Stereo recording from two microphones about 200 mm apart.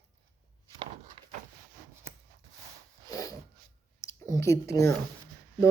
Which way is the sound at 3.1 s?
20° left (ahead or behind).